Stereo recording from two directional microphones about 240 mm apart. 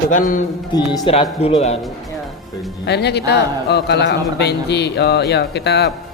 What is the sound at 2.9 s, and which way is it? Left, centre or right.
A man's voice, left.